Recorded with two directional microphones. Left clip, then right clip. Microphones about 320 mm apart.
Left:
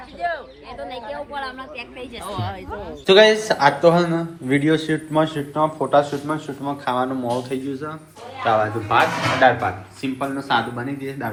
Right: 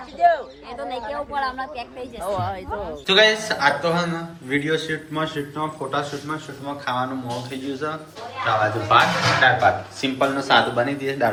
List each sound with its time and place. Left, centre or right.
0.2 s a sound: right
1.1 s a woman's voice: right
1.7 s a woman's voice: centre
2.6 s a man's voice: centre